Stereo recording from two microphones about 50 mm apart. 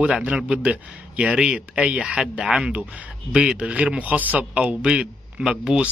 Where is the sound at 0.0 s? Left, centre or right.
Right.